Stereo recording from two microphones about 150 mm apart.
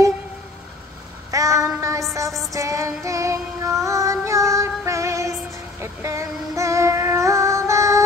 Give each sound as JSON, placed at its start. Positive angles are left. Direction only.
{"t": 1.3, "sound": "child singing", "side_deg": -20}
{"t": 1.8, "sound": "music", "side_deg": -20}
{"t": 2.5, "sound": "child singing", "side_deg": -20}
{"t": 5.8, "sound": "female singing", "side_deg": -20}